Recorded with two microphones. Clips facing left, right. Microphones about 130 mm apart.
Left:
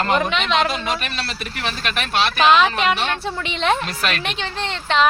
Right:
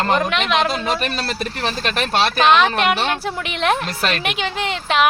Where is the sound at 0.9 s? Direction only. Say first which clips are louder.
Right 4 dB; 40° right (ahead or behind).